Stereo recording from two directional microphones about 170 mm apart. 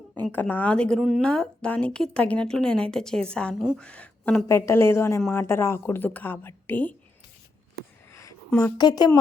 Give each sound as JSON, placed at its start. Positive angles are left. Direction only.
{"t": 0.3, "sound": "a woman's voice", "side_deg": 10}
{"t": 8.1, "sound": "a sound", "side_deg": 20}
{"t": 8.4, "sound": "a woman's voice", "side_deg": 10}
{"t": 8.8, "sound": "speech", "side_deg": 25}